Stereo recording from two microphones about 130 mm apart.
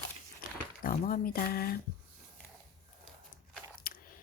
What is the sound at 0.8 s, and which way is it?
Speech, 90° left.